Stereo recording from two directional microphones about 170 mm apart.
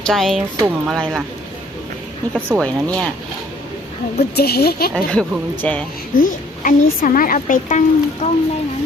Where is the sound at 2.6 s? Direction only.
5° left (ahead or behind).